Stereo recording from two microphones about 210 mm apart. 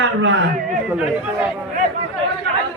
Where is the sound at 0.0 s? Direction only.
70° right (ahead or behind).